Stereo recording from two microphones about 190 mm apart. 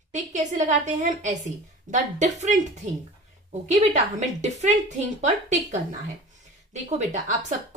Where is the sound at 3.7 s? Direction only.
35° right (ahead or behind).